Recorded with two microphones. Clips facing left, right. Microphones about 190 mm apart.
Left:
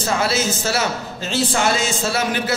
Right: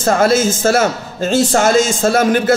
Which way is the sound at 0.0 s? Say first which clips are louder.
Right 8 dB; 50° right (ahead or behind).